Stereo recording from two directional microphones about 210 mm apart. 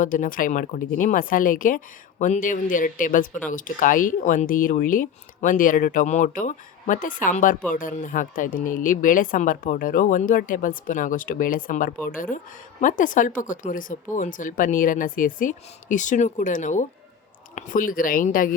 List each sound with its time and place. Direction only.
0.0 s speech: 40° left (ahead or behind)